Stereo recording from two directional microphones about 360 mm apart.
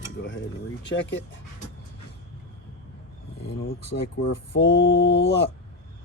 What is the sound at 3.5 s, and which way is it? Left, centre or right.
Speech, left.